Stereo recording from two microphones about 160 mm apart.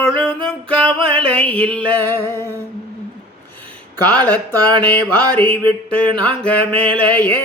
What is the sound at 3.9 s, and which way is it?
Speech, 25° right (ahead or behind).